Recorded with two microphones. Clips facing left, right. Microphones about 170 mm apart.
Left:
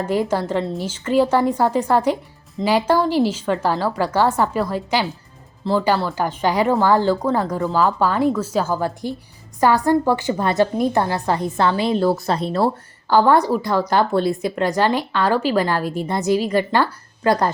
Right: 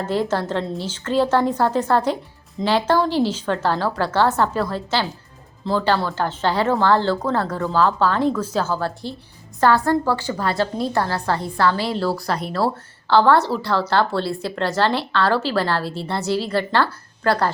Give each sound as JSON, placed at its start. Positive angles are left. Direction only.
{"t": 0.0, "sound": "a woman's voice", "side_deg": 10}